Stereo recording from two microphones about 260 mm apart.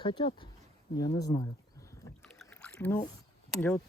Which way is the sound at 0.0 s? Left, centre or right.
Centre.